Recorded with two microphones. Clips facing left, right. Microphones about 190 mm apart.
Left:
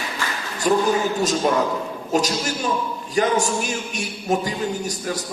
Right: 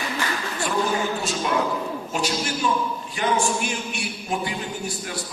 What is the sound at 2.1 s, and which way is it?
A man's voice, 40° left (ahead or behind).